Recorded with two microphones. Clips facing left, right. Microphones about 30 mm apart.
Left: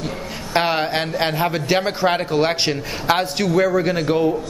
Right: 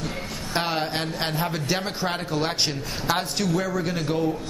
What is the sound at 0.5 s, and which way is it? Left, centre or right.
A man's voice, left.